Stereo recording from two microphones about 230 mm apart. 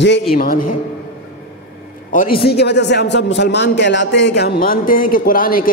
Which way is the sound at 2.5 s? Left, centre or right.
Left.